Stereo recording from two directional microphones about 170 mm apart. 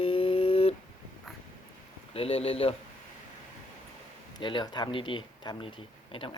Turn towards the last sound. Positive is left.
turn(degrees=30)  # may be behind; listen again after turning